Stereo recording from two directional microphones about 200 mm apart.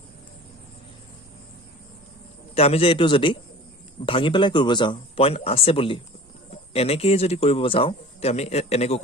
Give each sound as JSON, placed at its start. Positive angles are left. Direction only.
{"t": 2.6, "sound": "speech", "side_deg": 30}